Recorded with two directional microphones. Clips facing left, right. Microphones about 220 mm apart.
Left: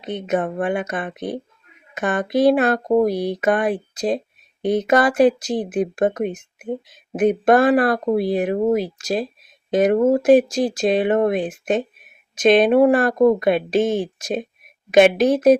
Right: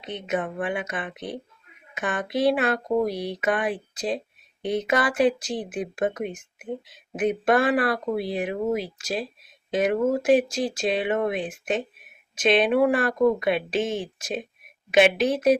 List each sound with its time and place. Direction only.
0.0 s speech: 45° left (ahead or behind)